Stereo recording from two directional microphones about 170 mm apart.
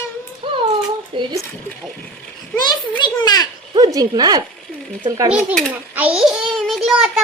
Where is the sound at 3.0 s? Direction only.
25° left (ahead or behind).